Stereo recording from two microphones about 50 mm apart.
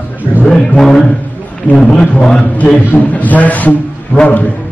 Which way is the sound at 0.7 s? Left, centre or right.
Centre.